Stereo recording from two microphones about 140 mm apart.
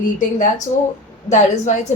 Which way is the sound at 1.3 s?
55° left (ahead or behind).